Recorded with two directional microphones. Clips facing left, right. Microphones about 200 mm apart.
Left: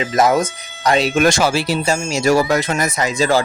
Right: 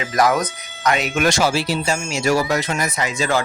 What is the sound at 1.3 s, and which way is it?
Speech, 55° left (ahead or behind).